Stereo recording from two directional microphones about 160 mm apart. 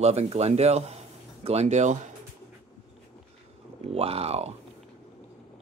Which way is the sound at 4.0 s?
40° right (ahead or behind).